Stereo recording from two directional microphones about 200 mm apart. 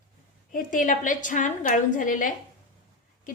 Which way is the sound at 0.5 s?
40° left (ahead or behind).